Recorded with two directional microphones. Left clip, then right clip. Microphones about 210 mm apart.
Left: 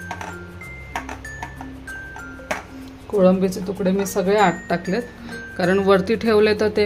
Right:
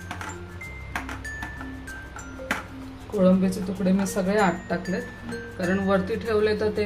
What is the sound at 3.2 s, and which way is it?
Speech, 40° left (ahead or behind).